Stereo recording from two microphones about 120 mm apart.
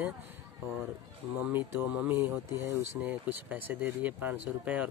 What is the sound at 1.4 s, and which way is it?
Speech, 15° right (ahead or behind).